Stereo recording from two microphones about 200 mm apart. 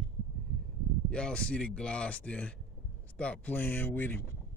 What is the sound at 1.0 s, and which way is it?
Speech, 5° left (ahead or behind).